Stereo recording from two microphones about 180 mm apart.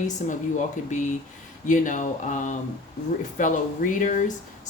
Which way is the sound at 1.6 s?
45° left (ahead or behind).